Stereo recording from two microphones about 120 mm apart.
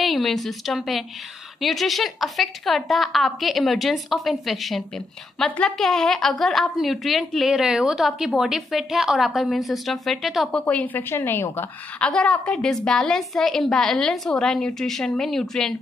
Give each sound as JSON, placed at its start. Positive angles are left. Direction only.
{"t": 0.0, "sound": "a woman's voice", "side_deg": 0}
{"t": 10.6, "sound": "a woman's voice", "side_deg": 15}
{"t": 12.0, "sound": "a woman's voice", "side_deg": 10}